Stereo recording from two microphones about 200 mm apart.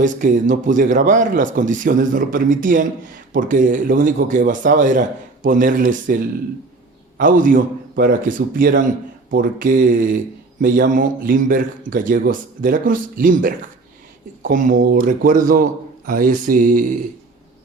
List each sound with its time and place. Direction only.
0.0 s a man's voice: 40° right (ahead or behind)